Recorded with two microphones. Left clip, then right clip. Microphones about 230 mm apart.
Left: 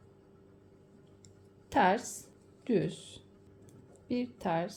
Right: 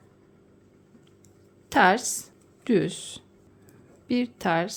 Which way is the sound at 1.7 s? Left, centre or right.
Right.